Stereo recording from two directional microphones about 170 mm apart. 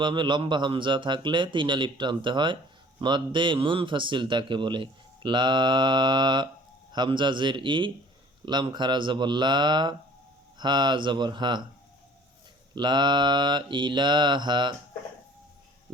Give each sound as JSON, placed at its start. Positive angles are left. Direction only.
{"t": 0.0, "sound": "a man's voice", "side_deg": -30}
{"t": 12.7, "sound": "a man's voice", "side_deg": -25}